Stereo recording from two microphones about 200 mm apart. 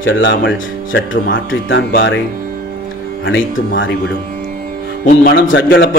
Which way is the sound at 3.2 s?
70° left (ahead or behind).